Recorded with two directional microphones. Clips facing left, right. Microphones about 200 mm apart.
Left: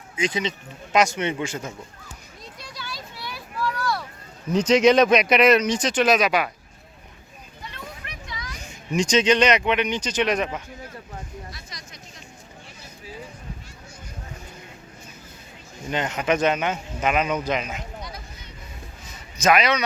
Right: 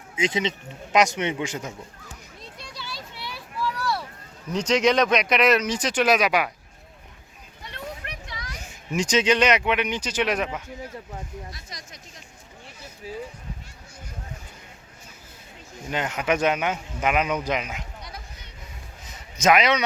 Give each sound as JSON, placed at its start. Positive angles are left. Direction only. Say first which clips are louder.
{"t": 0.2, "sound": "speech", "louder": "right 1 dB", "side_deg": -25}
{"t": 2.4, "sound": "children playing", "louder": "left 2 dB", "side_deg": -30}
{"t": 4.5, "sound": "speech", "louder": "left 4 dB", "side_deg": 5}
{"t": 8.0, "sound": "a sound", "louder": "even", "side_deg": -65}
{"t": 8.6, "sound": "speech", "louder": "left 3 dB", "side_deg": -5}
{"t": 11.7, "sound": "speech", "louder": "right 1 dB", "side_deg": -45}
{"t": 15.9, "sound": "speech", "louder": "left 1 dB", "side_deg": -5}
{"t": 19.0, "sound": "a sound", "louder": "even", "side_deg": -20}